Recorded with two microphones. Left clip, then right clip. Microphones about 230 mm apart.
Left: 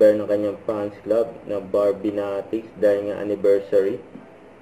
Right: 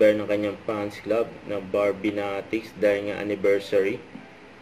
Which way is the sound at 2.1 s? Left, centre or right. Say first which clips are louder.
Left 3 dB; right.